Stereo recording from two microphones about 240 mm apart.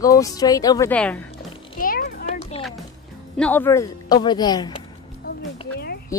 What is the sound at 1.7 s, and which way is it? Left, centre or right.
Music, left.